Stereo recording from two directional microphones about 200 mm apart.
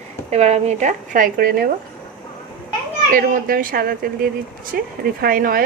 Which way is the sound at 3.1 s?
45° right (ahead or behind).